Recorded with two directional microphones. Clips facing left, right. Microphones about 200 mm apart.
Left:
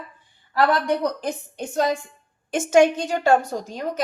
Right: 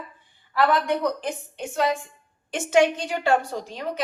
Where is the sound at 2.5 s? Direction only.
45° left (ahead or behind).